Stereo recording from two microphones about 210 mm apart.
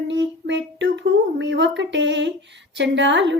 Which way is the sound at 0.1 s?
60° right (ahead or behind).